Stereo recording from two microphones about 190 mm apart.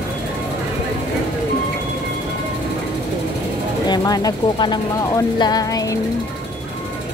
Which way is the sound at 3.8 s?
20° left (ahead or behind).